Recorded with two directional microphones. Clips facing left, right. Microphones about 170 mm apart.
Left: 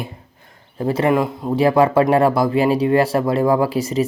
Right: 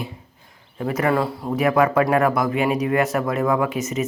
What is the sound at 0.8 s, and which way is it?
Speech, 30° left (ahead or behind).